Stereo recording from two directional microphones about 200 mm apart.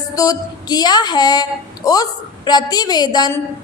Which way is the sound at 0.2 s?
20° left (ahead or behind).